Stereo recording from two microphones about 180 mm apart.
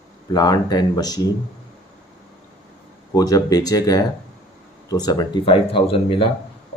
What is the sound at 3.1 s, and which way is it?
Speech, 20° left (ahead or behind).